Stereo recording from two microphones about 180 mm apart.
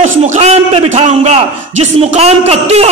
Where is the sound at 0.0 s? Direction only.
40° right (ahead or behind).